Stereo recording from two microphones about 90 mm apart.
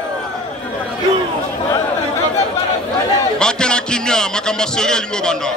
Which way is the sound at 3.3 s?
10° left (ahead or behind).